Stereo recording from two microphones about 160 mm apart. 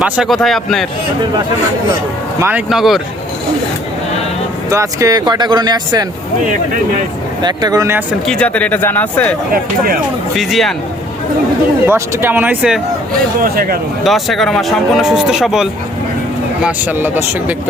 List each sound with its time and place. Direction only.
0.0 s speech: centre (ahead or behind)
2.4 s speech: 10° right (ahead or behind)
4.7 s speech: 20° right (ahead or behind)
7.4 s speech: 25° right (ahead or behind)
8.3 s speech: 5° left (ahead or behind)
10.3 s speech: centre (ahead or behind)
11.9 s speech: 15° right (ahead or behind)
13.4 s speech: 65° right (ahead or behind)
14.0 s speech: centre (ahead or behind)